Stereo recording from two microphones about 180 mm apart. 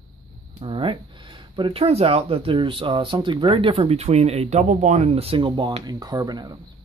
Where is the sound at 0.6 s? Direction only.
30° right (ahead or behind).